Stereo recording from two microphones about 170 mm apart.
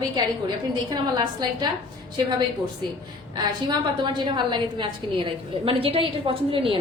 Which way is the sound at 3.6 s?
25° right (ahead or behind).